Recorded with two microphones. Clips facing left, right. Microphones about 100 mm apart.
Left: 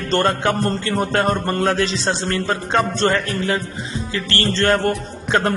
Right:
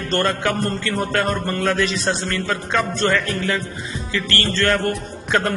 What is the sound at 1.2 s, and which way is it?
A man's voice, 45° left (ahead or behind).